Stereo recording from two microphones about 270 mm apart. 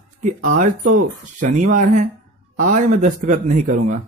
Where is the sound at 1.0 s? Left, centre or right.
Right.